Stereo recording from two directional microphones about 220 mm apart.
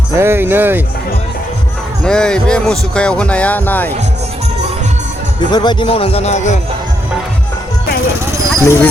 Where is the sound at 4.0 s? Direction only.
30° right (ahead or behind).